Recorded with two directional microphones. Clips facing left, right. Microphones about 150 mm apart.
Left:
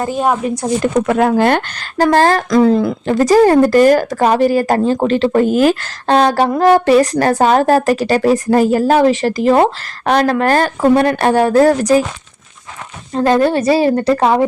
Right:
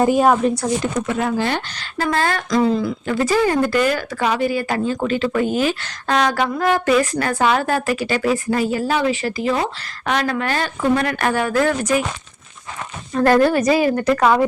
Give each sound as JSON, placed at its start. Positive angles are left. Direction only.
{"t": 0.2, "sound": "speech", "side_deg": 0}
{"t": 0.8, "sound": "a woman's voice", "side_deg": 55}
{"t": 6.1, "sound": "a woman's voice", "side_deg": 35}
{"t": 13.1, "sound": "a woman's voice", "side_deg": 25}